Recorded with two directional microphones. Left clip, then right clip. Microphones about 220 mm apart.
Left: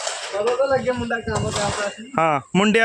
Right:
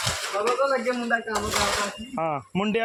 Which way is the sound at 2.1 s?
30° left (ahead or behind).